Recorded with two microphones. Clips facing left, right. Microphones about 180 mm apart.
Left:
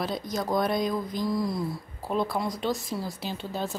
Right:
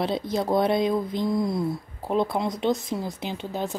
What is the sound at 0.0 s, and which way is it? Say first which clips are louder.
Speech: right 5 dB; 25° right (ahead or behind).